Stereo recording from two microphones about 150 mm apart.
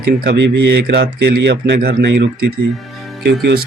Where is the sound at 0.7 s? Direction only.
90° right.